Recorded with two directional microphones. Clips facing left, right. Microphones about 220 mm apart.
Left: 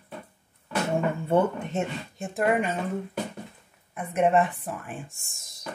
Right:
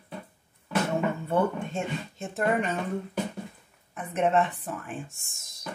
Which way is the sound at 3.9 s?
10° left (ahead or behind).